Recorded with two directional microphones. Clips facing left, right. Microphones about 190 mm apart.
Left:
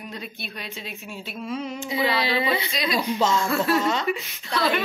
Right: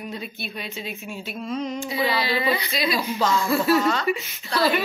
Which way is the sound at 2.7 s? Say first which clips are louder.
Even; 5° right (ahead or behind).